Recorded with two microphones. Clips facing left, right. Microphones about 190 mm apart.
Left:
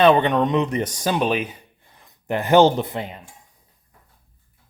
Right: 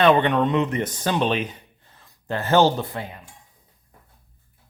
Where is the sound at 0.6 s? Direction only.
30° left (ahead or behind).